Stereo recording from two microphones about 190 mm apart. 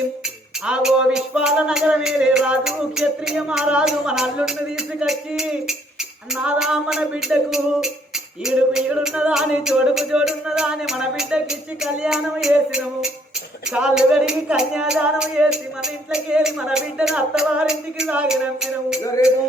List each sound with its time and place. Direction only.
0.6 s speech: 5° right (ahead or behind)
19.2 s music: 20° left (ahead or behind)